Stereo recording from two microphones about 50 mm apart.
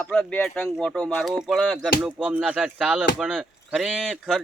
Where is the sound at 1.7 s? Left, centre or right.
Centre.